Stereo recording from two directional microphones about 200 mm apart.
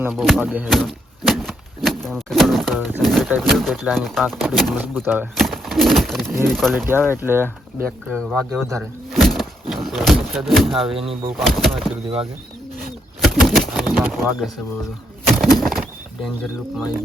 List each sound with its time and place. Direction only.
0.0 s speech: centre (ahead or behind)
6.7 s speech: 10° right (ahead or behind)
7.9 s speech: 5° left (ahead or behind)
9.1 s a sound: centre (ahead or behind)
10.9 s speech: 30° right (ahead or behind)
11.3 s speech: centre (ahead or behind)
13.2 s bird: centre (ahead or behind)
14.0 s speech: centre (ahead or behind)
15.3 s bird: centre (ahead or behind)